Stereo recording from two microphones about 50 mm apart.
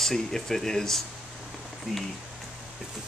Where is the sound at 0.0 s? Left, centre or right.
Centre.